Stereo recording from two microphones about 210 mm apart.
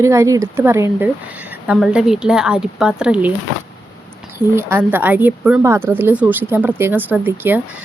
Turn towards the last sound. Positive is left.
turn(degrees=-10)  # may be behind; listen again after turning